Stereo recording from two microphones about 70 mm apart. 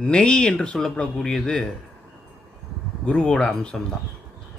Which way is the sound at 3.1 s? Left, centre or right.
Centre.